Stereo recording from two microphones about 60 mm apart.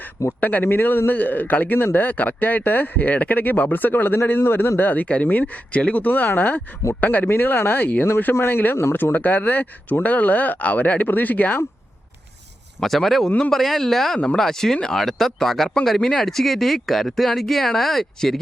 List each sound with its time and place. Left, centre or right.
0.3 s a man's voice: left
12.8 s speech: centre